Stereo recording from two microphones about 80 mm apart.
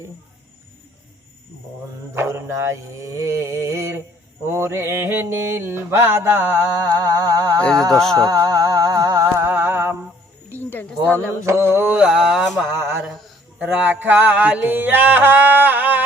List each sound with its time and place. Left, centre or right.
2.1 s mantra: right
6.9 s mantra: right
7.6 s humming: centre
8.1 s music: right
9.3 s a sound: right
10.6 s a sound: left
11.1 s mantra: left
11.4 s mantra: right
11.9 s mantra: centre
13.6 s mantra: right